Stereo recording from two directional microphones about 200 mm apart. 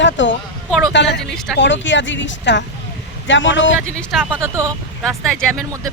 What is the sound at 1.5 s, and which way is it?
Speech, 65° left (ahead or behind).